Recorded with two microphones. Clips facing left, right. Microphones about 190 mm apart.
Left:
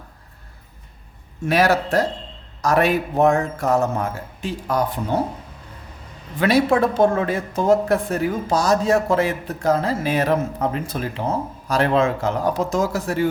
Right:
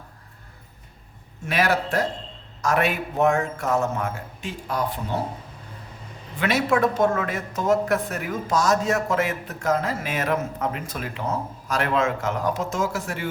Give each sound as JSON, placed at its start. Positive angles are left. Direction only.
{"t": 1.5, "sound": "speech", "side_deg": 40}
{"t": 6.4, "sound": "speech", "side_deg": 35}